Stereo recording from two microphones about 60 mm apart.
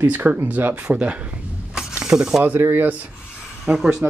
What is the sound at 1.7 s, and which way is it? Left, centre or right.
Snake, centre.